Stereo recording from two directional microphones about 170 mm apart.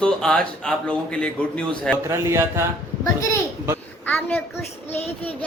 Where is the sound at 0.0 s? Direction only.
5° left (ahead or behind).